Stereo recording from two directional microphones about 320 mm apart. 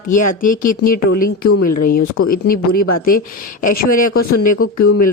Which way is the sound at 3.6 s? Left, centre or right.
Left.